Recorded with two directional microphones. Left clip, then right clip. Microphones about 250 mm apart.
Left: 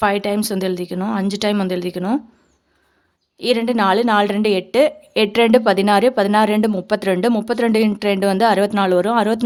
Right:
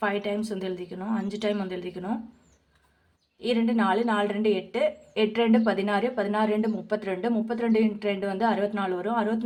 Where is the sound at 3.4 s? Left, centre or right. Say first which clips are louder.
Left 9 dB; left.